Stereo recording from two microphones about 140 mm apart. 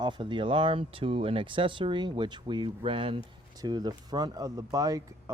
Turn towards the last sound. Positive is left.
turn(degrees=-25)  # may be behind; listen again after turning